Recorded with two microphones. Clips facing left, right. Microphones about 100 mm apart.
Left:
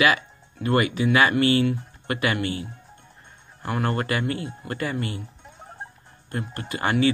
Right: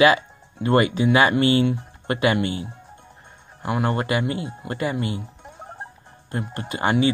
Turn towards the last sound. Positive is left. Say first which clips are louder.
# right 2 dB
turn(degrees=-20)  # may be behind; listen again after turning